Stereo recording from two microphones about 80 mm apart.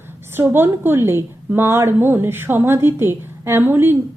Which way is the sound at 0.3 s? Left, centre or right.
Right.